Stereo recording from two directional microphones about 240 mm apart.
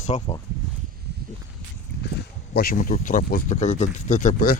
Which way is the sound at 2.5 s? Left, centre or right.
Left.